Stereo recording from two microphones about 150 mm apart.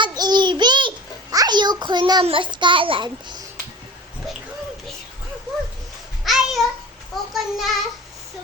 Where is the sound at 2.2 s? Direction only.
35° right (ahead or behind).